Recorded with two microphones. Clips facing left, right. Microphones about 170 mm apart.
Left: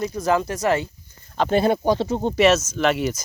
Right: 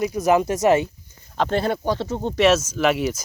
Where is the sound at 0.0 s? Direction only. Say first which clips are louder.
Right 3 dB; 15° right (ahead or behind).